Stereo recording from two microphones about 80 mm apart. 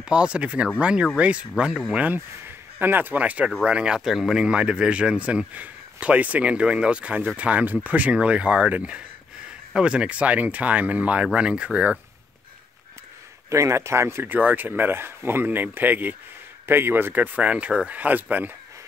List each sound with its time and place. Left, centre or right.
0.0 s a man's voice: centre
13.5 s speech: right